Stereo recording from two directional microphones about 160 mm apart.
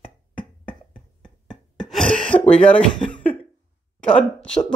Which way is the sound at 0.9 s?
5° left (ahead or behind).